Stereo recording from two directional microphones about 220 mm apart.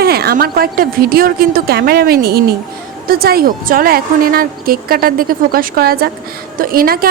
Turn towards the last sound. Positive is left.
turn(degrees=-40)  # may be behind; listen again after turning